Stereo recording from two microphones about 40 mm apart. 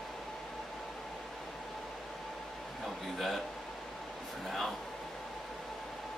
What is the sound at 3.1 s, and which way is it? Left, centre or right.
Speech, centre.